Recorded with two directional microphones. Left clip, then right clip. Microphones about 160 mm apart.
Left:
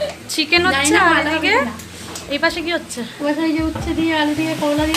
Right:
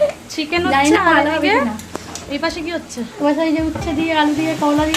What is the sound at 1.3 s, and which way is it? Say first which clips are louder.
Speech: right 1 dB; 15° right (ahead or behind).